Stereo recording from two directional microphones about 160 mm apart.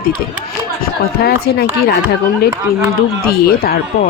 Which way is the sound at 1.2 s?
75° left (ahead or behind).